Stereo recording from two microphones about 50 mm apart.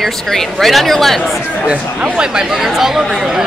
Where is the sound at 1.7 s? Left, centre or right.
Centre.